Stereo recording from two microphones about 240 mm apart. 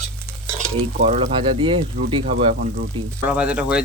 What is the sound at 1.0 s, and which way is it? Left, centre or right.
Speech, right.